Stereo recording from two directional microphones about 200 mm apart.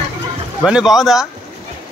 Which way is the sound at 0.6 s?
Centre (ahead or behind).